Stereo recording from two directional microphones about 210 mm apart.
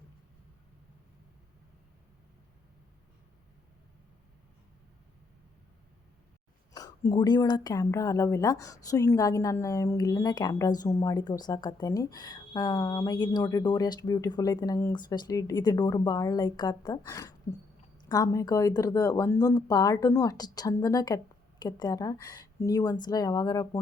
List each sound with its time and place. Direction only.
6.7 s speech: 15° left (ahead or behind)